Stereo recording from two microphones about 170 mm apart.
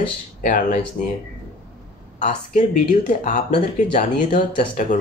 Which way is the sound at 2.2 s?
45° left (ahead or behind).